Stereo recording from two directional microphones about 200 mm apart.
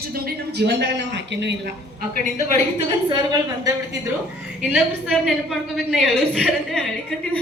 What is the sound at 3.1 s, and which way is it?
Speech, 20° right (ahead or behind).